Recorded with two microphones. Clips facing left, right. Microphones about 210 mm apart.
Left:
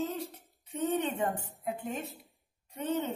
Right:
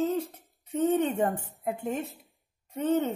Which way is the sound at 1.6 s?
50° right (ahead or behind).